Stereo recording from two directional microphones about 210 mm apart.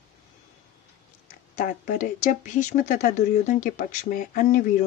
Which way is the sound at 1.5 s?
40° left (ahead or behind).